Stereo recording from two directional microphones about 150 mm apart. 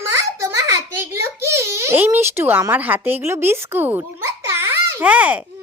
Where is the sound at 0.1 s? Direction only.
20° right (ahead or behind).